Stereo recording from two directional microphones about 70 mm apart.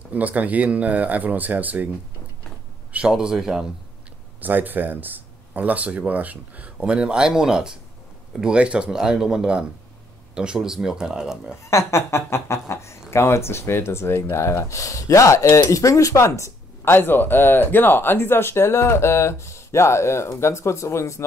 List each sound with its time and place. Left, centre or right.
0.1 s speech: right
3.1 s speech: centre
4.4 s speech: right; by 11.5 s centre
11.6 s speech: left